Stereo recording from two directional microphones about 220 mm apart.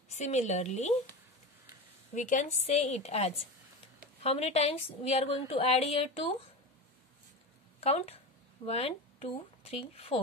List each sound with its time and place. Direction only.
0.1 s speech: 30° left (ahead or behind)
2.1 s a woman's voice: 35° left (ahead or behind)
7.8 s a woman's voice: 30° left (ahead or behind)